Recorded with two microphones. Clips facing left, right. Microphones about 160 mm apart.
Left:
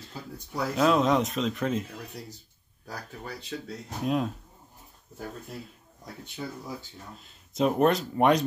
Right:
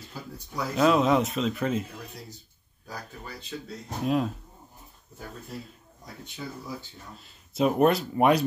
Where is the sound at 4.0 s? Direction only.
Centre (ahead or behind).